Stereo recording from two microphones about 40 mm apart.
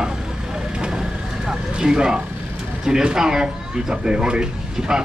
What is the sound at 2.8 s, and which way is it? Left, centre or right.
A man's voice, centre.